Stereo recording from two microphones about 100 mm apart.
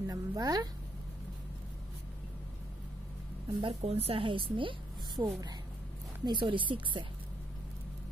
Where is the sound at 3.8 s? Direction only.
80° right; by 4.8 s 60° right (ahead or behind).